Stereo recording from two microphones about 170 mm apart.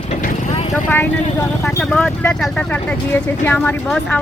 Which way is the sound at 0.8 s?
10° left (ahead or behind).